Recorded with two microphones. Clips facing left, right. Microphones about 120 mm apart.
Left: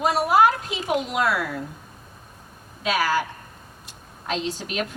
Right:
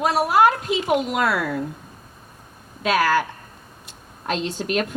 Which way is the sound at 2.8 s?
55° right (ahead or behind).